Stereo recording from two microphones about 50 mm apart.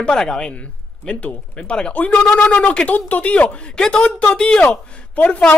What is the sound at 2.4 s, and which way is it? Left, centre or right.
Speech, left.